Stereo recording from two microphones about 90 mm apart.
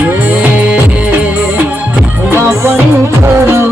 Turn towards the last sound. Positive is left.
turn(degrees=-30)  # may be behind; listen again after turning